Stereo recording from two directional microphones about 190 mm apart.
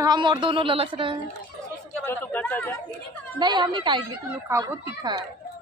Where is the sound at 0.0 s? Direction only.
20° right (ahead or behind).